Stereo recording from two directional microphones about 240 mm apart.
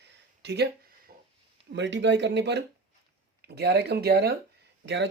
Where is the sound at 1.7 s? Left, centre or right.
Right.